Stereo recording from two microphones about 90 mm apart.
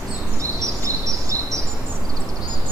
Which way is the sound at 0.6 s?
35° right (ahead or behind).